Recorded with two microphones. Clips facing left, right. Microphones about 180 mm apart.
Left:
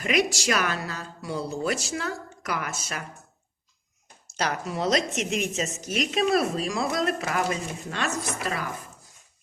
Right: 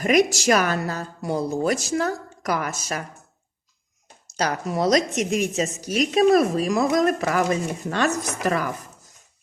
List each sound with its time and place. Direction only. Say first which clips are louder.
0.0 s a woman's voice: right 6 dB; 45° right (ahead or behind)
4.4 s a woman's voice: right 4 dB; 40° right (ahead or behind)